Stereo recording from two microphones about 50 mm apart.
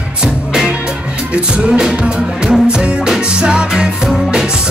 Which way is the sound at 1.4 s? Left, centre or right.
Centre.